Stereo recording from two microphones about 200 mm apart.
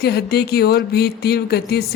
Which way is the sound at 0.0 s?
55° left (ahead or behind).